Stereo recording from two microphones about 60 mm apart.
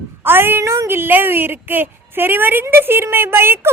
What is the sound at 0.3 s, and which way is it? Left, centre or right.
Speech, right.